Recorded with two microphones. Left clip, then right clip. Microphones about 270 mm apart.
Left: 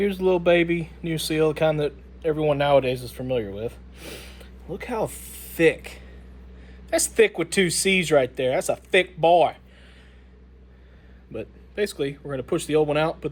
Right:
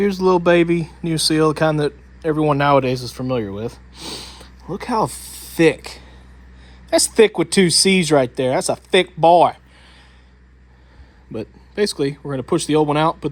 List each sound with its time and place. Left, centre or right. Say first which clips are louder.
0.0 s speech: right 5 dB; right
11.3 s a sound: right 5 dB; right
11.9 s speech: right 6 dB; right